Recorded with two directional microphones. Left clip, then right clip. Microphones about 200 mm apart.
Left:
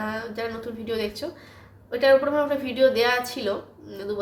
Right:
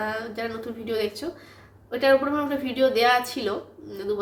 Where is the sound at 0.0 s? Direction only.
5° right (ahead or behind).